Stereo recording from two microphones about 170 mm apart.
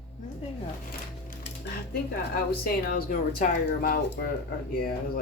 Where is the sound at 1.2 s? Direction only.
65° left (ahead or behind).